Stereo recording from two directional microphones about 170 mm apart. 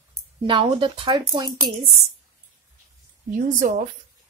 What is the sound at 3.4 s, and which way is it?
Speech, 50° right (ahead or behind).